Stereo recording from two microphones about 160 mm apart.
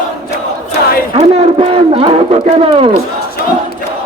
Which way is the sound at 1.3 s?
40° right (ahead or behind).